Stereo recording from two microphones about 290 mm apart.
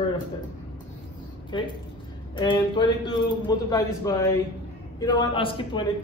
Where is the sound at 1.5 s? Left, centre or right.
Centre.